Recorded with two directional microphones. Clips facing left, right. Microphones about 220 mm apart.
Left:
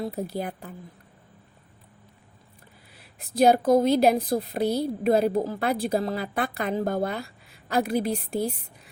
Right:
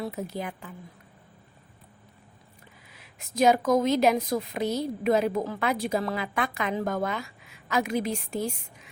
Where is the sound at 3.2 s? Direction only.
35° left (ahead or behind).